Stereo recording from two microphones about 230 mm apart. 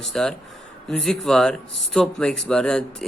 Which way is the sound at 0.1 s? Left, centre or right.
Centre.